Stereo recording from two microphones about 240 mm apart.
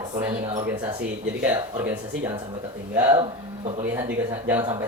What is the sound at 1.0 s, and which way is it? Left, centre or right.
A man's voice, centre.